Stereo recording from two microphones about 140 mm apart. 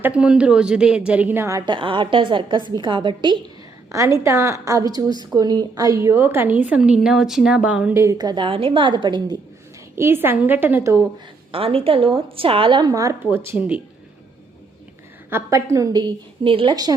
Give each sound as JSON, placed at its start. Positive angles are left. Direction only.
{"t": 0.0, "sound": "a woman's voice", "side_deg": -10}
{"t": 1.6, "sound": "a woman's voice", "side_deg": -35}
{"t": 3.9, "sound": "a woman's voice", "side_deg": -20}
{"t": 8.0, "sound": "a woman's voice", "side_deg": -30}
{"t": 9.9, "sound": "a woman's voice", "side_deg": -15}
{"t": 11.5, "sound": "a woman's voice", "side_deg": -40}
{"t": 15.3, "sound": "a woman's voice", "side_deg": -20}